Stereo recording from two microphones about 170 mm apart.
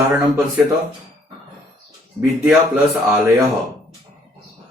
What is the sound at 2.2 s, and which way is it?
Speech, 15° right (ahead or behind).